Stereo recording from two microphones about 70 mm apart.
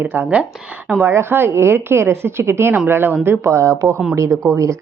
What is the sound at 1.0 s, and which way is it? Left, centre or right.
A woman's voice, right.